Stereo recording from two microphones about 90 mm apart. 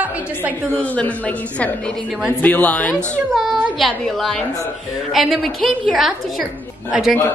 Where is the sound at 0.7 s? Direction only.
15° left (ahead or behind).